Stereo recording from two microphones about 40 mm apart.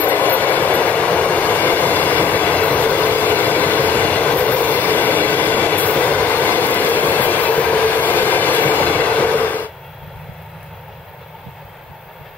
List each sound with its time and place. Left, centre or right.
0.0 s train: left